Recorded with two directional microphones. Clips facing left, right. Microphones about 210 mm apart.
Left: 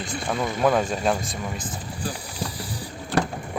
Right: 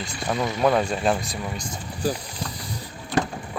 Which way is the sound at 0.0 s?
Centre (ahead or behind).